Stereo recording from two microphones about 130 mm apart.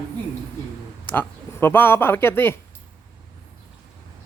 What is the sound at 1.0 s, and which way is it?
Speech, 15° left (ahead or behind).